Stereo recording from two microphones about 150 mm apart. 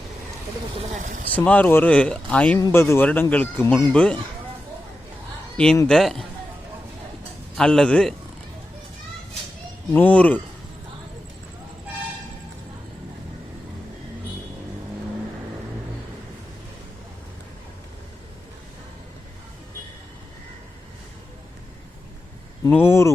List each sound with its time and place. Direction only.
1.3 s speech: 10° left (ahead or behind)
2.6 s speech: 20° left (ahead or behind)
5.9 s a man's voice: centre (ahead or behind)
7.5 s a man's voice: 5° left (ahead or behind)
9.9 s speech: 10° left (ahead or behind)
22.7 s speech: 15° left (ahead or behind)